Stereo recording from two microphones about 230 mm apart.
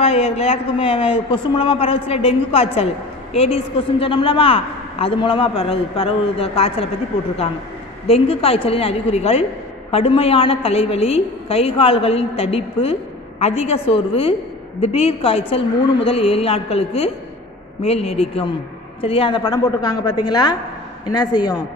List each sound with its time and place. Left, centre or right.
0.0 s a woman's voice: left
8.1 s a woman's voice: left